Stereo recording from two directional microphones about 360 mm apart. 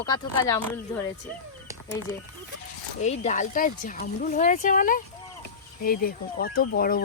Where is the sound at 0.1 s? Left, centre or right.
Centre.